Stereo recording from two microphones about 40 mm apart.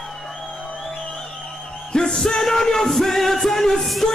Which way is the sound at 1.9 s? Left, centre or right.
Centre.